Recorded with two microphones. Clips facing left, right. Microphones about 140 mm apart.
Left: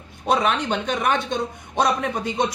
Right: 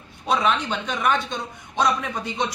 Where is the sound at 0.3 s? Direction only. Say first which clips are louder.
Left 2 dB; 50° left (ahead or behind).